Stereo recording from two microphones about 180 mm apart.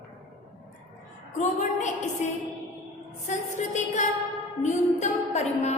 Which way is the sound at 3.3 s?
40° left (ahead or behind).